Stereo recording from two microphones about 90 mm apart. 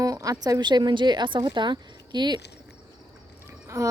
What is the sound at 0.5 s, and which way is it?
Speech, 55° right (ahead or behind).